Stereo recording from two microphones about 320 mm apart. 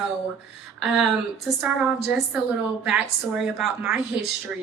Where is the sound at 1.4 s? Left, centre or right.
Centre.